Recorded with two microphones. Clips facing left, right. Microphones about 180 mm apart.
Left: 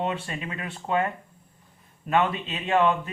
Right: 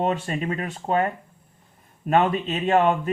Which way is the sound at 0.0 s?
40° right (ahead or behind).